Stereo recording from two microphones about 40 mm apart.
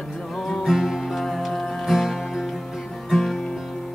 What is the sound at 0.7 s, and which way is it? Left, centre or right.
Music, centre.